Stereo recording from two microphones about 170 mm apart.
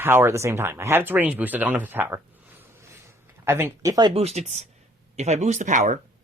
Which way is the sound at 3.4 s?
15° right (ahead or behind).